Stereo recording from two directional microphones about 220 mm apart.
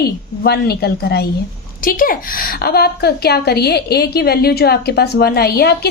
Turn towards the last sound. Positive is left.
turn(degrees=45)  # may be behind; listen again after turning